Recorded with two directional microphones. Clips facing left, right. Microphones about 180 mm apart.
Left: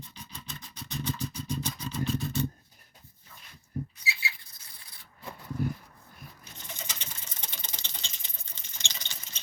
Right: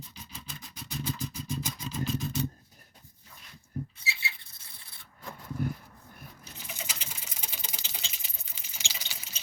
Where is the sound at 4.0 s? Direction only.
25° right (ahead or behind).